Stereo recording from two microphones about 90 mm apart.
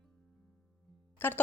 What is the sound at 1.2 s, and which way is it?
Speech, 25° left (ahead or behind).